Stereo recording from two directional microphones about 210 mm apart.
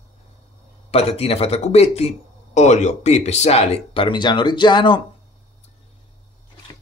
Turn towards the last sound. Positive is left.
turn(degrees=20)  # may be behind; listen again after turning